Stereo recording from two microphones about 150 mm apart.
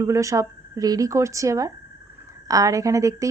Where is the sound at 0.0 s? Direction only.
20° right (ahead or behind).